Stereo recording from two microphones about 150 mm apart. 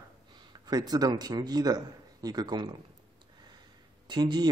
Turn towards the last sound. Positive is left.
turn(degrees=-30)  # may be behind; listen again after turning